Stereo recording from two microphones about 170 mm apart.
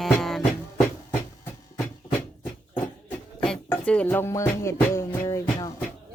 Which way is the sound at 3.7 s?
10° left (ahead or behind).